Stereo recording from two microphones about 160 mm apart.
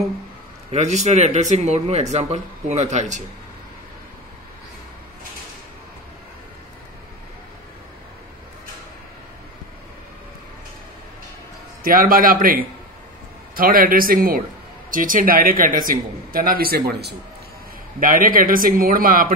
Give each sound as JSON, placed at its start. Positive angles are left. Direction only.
{"t": 0.7, "sound": "speech", "side_deg": -45}
{"t": 11.8, "sound": "speech", "side_deg": -60}
{"t": 18.0, "sound": "speech", "side_deg": -60}